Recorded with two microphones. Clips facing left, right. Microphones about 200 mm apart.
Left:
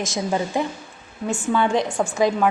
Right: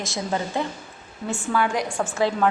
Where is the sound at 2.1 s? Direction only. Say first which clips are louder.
Left 3 dB; 15° left (ahead or behind).